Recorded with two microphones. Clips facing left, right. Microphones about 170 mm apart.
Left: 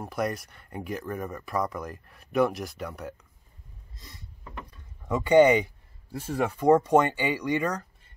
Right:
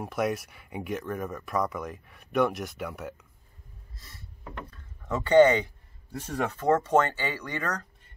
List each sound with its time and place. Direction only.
0.0 s speech: centre (ahead or behind)
3.9 s a sound: 20° left (ahead or behind)
6.3 s speech: 10° left (ahead or behind)